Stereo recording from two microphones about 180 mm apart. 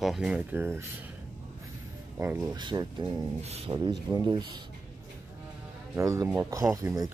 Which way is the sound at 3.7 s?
20° right (ahead or behind).